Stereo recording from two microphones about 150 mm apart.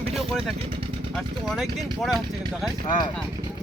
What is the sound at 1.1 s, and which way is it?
Speech, centre (ahead or behind).